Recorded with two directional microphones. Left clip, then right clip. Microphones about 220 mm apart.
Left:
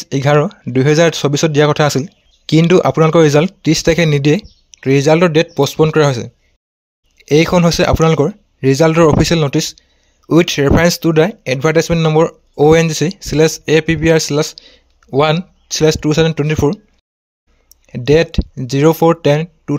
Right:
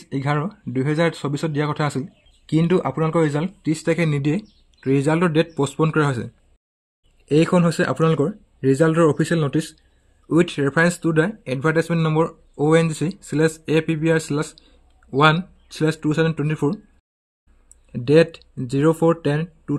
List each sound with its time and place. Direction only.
0.0 s speech: 40° left (ahead or behind)
17.9 s speech: 35° left (ahead or behind)